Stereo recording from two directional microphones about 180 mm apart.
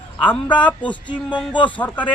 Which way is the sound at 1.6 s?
10° left (ahead or behind).